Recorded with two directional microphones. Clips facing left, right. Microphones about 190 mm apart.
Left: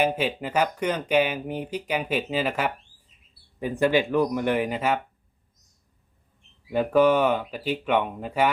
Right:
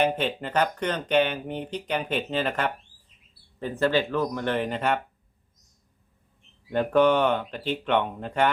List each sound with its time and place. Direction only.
0.0 s speech: 5° left (ahead or behind)
6.7 s speech: 5° left (ahead or behind)